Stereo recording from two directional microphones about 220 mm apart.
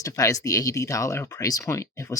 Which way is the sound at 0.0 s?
15° left (ahead or behind).